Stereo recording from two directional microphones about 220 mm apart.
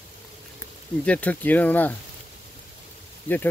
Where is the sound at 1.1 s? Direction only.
5° left (ahead or behind).